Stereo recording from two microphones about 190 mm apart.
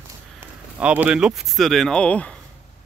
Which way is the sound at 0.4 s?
10° right (ahead or behind).